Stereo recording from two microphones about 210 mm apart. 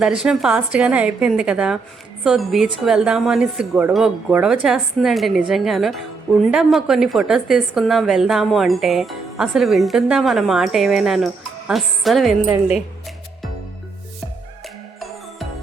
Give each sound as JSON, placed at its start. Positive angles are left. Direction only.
{"t": 0.0, "sound": "a woman's voice", "side_deg": -5}